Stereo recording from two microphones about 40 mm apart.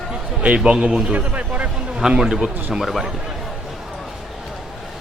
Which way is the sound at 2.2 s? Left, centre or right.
Centre.